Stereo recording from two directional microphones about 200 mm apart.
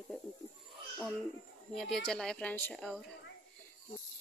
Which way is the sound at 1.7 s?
Centre (ahead or behind).